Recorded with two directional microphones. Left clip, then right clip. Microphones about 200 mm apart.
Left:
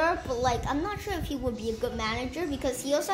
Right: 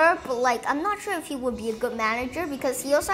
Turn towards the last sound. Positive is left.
turn(degrees=-10)  # may be behind; listen again after turning